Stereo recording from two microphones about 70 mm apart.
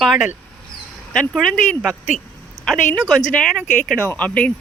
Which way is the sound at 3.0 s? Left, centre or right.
Centre.